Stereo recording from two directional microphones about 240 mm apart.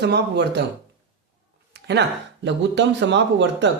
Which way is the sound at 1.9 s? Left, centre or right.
Right.